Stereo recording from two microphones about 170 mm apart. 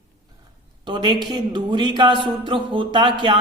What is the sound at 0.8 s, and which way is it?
Speech, 25° right (ahead or behind).